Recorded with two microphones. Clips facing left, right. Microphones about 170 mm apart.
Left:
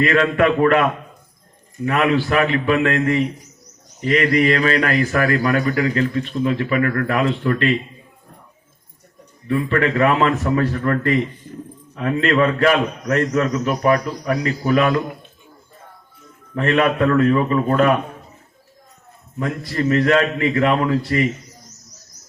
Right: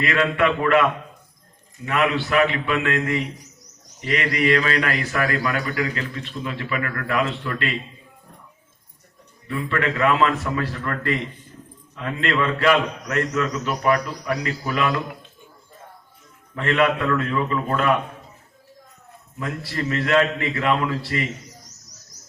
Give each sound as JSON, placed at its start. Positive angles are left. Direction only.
{"t": 0.0, "sound": "a man's voice", "side_deg": 35}
{"t": 9.6, "sound": "a man's voice", "side_deg": 30}
{"t": 16.6, "sound": "a man's voice", "side_deg": 30}
{"t": 19.4, "sound": "a man's voice", "side_deg": 35}